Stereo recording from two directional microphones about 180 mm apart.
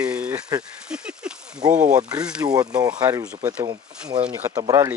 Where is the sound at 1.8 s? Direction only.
20° right (ahead or behind).